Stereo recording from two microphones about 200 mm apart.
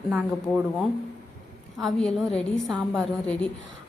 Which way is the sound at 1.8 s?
Centre (ahead or behind).